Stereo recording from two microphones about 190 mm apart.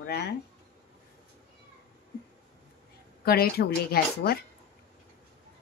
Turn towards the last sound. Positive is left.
turn(degrees=55)  # may be behind; listen again after turning